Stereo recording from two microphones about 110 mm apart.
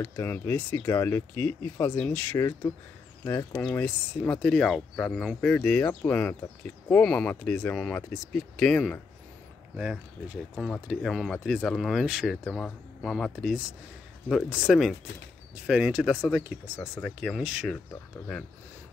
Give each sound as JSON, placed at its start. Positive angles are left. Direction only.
{"t": 0.0, "sound": "speech", "side_deg": 20}
{"t": 2.3, "sound": "speech", "side_deg": 25}
{"t": 3.8, "sound": "speech", "side_deg": 10}
{"t": 7.7, "sound": "speech", "side_deg": 5}
{"t": 9.8, "sound": "speech", "side_deg": -10}
{"t": 17.0, "sound": "speech", "side_deg": 10}
{"t": 17.4, "sound": "speech", "side_deg": -10}